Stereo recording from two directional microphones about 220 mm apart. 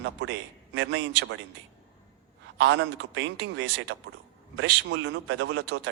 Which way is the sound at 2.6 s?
55° right (ahead or behind).